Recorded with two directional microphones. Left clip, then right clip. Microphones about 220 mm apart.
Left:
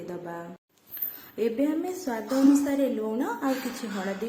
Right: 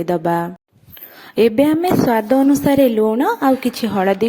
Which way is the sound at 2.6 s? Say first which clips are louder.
Right 14 dB; 40° right (ahead or behind).